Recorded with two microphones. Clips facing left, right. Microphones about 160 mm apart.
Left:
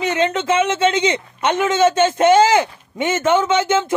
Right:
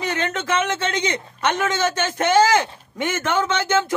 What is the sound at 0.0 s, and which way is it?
A man's voice, 20° left (ahead or behind).